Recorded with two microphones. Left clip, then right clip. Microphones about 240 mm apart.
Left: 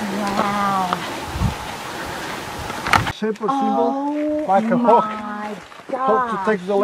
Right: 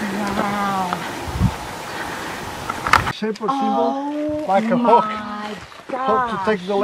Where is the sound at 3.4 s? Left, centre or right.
Centre.